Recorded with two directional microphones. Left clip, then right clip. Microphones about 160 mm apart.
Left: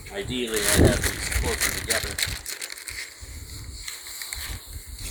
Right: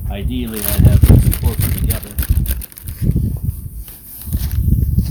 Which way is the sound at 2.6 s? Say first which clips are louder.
Left 5 dB; 75° right (ahead or behind).